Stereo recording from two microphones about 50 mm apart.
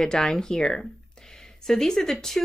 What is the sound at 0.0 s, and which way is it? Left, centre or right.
A woman's voice, centre.